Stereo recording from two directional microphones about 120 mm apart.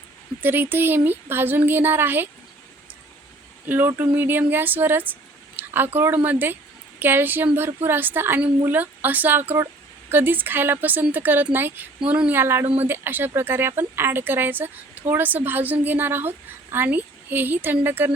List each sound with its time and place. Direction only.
0.4 s speech: 15° right (ahead or behind)
3.7 s speech: 15° right (ahead or behind)